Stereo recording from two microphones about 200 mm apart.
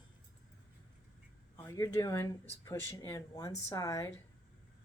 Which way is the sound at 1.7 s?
15° left (ahead or behind).